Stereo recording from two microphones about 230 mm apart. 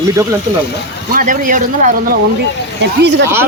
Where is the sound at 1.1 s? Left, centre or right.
Right.